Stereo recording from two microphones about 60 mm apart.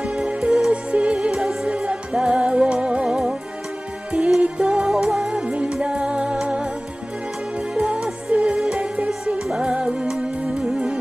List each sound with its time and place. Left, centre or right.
0.0 s music: centre
1.3 s music: centre
4.4 s music: centre